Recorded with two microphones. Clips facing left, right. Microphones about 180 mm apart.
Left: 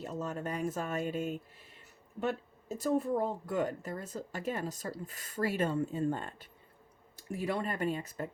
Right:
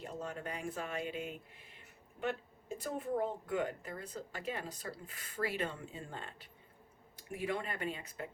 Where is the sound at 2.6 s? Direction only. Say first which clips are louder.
Left 8 dB; 40° left (ahead or behind).